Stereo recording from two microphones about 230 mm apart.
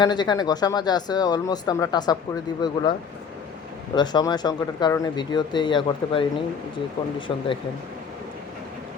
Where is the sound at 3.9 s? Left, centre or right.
Centre.